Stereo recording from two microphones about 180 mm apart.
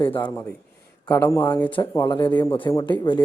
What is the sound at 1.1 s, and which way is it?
Speech, 15° left (ahead or behind).